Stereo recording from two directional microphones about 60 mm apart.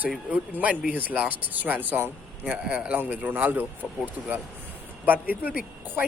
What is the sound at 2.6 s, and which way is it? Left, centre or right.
Speech, centre.